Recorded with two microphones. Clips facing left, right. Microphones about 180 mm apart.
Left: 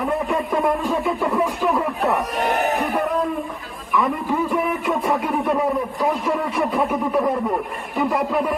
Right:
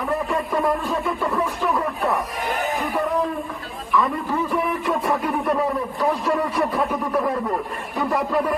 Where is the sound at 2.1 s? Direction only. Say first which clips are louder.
Left 4 dB; 70° left (ahead or behind).